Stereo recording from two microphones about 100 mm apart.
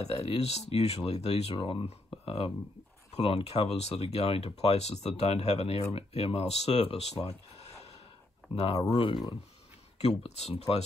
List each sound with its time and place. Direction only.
0.0 s speech: 75° left (ahead or behind)
3.2 s speech: 80° left
8.9 s speech: 60° left (ahead or behind)
10.0 s speech: 90° left